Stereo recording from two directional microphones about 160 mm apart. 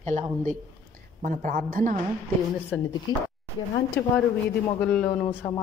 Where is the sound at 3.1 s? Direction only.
25° left (ahead or behind).